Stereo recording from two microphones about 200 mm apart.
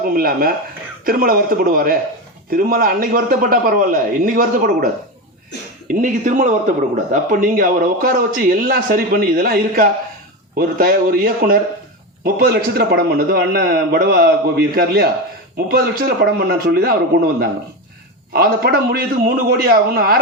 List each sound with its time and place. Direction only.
0.0 s speech: 45° right (ahead or behind)
5.9 s speech: 40° right (ahead or behind)
18.3 s speech: 50° right (ahead or behind)